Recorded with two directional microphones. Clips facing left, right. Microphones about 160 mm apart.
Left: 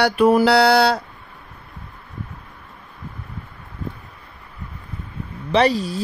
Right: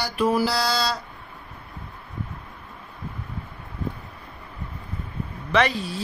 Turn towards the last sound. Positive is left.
turn(degrees=40)  # may be behind; listen again after turning